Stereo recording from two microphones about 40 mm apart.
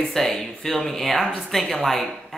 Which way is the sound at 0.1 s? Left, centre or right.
Centre.